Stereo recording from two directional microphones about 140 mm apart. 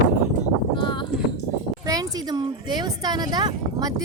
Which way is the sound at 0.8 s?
35° left (ahead or behind).